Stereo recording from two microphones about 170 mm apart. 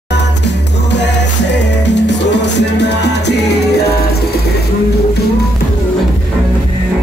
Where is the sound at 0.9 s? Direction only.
90° left.